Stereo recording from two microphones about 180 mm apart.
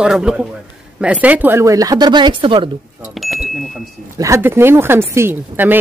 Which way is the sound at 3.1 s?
Centre (ahead or behind).